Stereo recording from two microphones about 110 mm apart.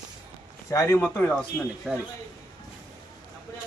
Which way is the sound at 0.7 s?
30° left (ahead or behind).